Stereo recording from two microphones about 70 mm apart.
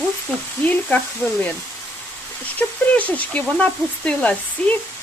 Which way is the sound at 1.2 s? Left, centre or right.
Centre.